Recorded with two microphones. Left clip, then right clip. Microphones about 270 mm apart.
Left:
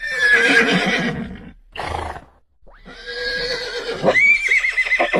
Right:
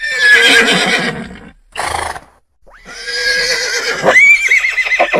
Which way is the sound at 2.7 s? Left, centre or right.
Right.